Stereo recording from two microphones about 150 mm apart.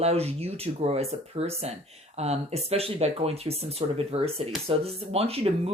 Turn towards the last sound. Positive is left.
turn(degrees=-40)  # may be behind; listen again after turning